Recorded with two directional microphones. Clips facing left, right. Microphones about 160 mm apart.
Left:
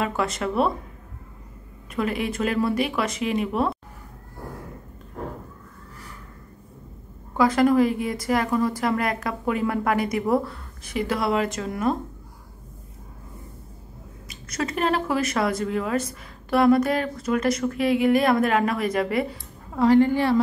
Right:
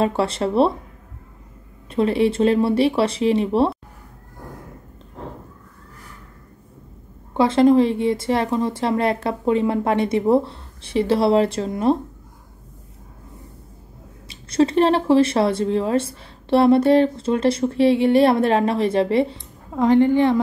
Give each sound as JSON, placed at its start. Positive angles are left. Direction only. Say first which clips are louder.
{"t": 0.0, "sound": "speech", "louder": "right 5 dB", "side_deg": -30}
{"t": 1.9, "sound": "speech", "louder": "right 8 dB", "side_deg": -30}
{"t": 7.3, "sound": "speech", "louder": "right 4 dB", "side_deg": -25}
{"t": 14.2, "sound": "speech", "louder": "right 11 dB", "side_deg": -30}
{"t": 19.7, "sound": "speech", "louder": "right 2 dB", "side_deg": -15}